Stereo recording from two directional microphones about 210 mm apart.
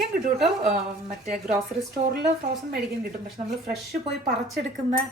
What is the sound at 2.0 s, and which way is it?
Speech, 30° right (ahead or behind).